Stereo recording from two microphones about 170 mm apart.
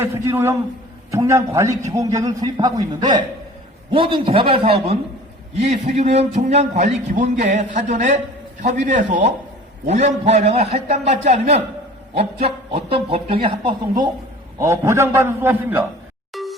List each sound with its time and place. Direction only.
0.0 s a man's voice: 15° right (ahead or behind); by 13.7 s 30° right (ahead or behind)
14.6 s a man's voice: 15° right (ahead or behind)
16.3 s music: centre (ahead or behind)